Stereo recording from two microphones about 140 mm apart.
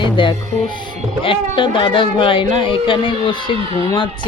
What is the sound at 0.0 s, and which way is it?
Music, 35° left (ahead or behind).